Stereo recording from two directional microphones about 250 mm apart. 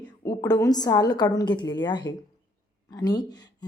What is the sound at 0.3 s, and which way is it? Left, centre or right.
Speech, centre.